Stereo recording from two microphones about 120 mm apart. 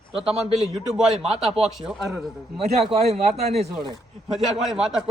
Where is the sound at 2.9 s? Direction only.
65° right (ahead or behind).